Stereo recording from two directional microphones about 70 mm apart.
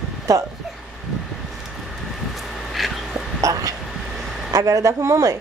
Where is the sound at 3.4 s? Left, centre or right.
Right.